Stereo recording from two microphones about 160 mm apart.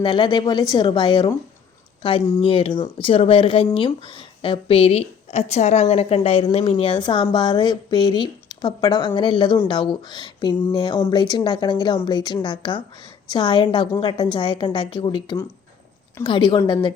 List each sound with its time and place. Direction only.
0.0 s a woman's voice: 30° left (ahead or behind)